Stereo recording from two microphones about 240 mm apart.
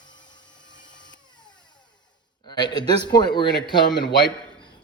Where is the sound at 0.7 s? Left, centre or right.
Centre.